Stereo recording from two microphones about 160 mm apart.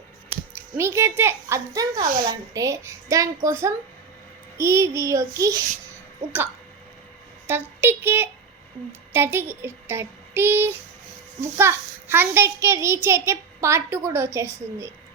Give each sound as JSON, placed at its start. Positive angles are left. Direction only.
{"t": 0.8, "sound": "a child's voice", "side_deg": -15}
{"t": 7.4, "sound": "a child's voice", "side_deg": -15}